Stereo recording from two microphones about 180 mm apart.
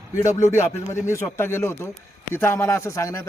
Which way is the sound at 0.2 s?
15° left (ahead or behind).